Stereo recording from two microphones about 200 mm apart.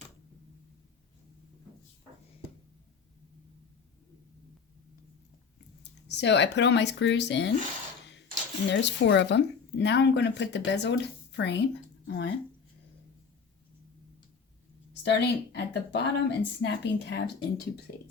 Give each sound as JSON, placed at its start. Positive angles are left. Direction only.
{"t": 5.8, "sound": "speech", "side_deg": 60}
{"t": 8.6, "sound": "speech", "side_deg": 60}
{"t": 15.0, "sound": "speech", "side_deg": 60}